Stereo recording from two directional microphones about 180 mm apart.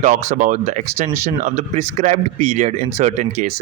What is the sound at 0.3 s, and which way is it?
A man's voice, 45° right (ahead or behind).